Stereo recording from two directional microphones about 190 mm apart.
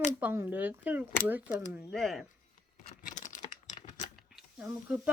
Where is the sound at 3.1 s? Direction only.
40° left (ahead or behind).